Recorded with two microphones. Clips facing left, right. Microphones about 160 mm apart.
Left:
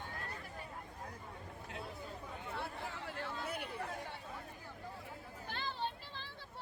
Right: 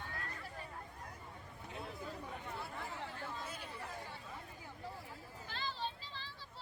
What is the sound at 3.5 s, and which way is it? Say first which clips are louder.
Chatter: left 6 dB; 60° left (ahead or behind).